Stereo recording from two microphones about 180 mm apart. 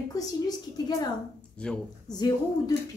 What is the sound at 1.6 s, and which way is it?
Speech, 5° left (ahead or behind).